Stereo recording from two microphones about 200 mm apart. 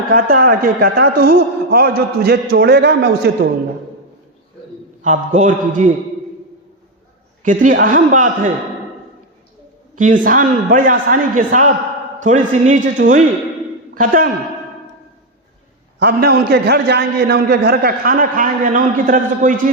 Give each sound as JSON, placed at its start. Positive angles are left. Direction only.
{"t": 0.1, "sound": "a man's voice", "side_deg": -45}
{"t": 5.0, "sound": "a man's voice", "side_deg": -35}
{"t": 7.4, "sound": "a man's voice", "side_deg": -40}
{"t": 9.9, "sound": "a man's voice", "side_deg": -40}
{"t": 16.0, "sound": "a man's voice", "side_deg": -50}